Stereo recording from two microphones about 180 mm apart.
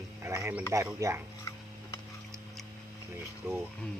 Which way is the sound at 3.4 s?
10° right (ahead or behind).